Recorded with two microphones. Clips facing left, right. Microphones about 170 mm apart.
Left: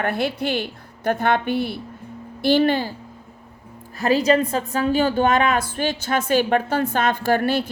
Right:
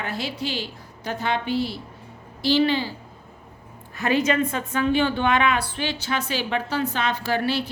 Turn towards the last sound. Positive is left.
turn(degrees=50)  # may be behind; listen again after turning